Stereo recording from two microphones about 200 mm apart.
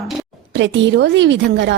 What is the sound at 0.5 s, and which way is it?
A woman's voice, 65° right (ahead or behind).